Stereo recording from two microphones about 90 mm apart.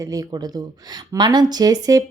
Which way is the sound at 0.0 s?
40° right (ahead or behind).